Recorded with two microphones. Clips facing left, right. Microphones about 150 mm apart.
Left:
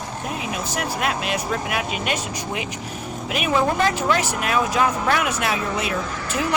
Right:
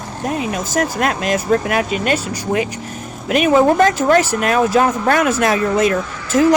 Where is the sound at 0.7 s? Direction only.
40° right (ahead or behind).